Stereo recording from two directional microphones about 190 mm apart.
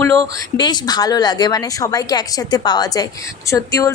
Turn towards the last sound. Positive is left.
turn(degrees=15)  # may be behind; listen again after turning